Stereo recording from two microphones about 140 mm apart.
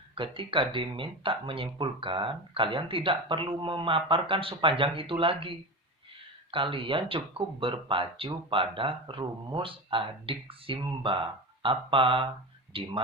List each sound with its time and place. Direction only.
0.2 s speech: 40° right (ahead or behind)